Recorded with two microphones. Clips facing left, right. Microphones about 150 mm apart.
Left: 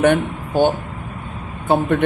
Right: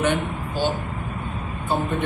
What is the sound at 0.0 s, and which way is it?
Speech, 55° left (ahead or behind).